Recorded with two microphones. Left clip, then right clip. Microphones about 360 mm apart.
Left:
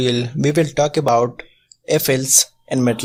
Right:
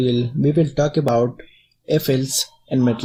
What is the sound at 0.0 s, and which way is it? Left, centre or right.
Speech, left.